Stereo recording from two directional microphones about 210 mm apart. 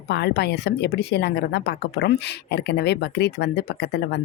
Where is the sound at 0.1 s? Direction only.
55° left (ahead or behind).